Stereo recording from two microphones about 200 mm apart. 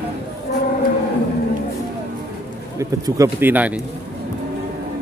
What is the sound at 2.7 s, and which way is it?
A man's voice, 15° right (ahead or behind).